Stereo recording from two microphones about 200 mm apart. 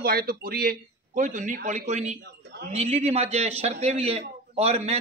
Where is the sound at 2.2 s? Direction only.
55° right (ahead or behind).